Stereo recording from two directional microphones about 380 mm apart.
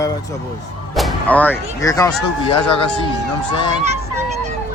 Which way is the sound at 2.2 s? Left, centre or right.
Centre.